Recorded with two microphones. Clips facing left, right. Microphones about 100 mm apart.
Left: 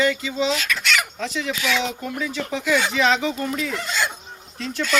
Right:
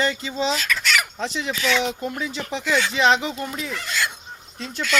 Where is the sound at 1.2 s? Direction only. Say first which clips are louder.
Even; 25° right (ahead or behind).